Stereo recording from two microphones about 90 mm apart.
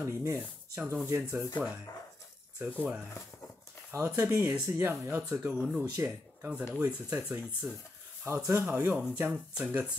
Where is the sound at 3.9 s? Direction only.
30° right (ahead or behind).